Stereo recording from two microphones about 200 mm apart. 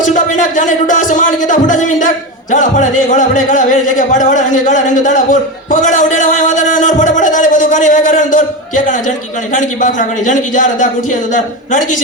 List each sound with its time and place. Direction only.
0.0 s speech: 40° left (ahead or behind)